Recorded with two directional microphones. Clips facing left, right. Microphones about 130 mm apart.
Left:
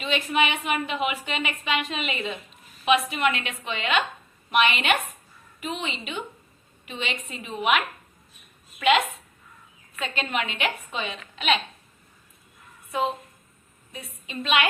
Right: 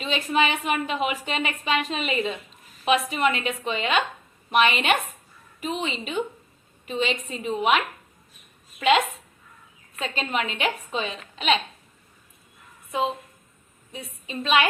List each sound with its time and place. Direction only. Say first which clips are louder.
0.0 s a woman's voice: right 1 dB; 35° right (ahead or behind)
10.0 s a woman's voice: right 1 dB; 35° right (ahead or behind)
13.9 s a woman's voice: right 2 dB; 35° right (ahead or behind)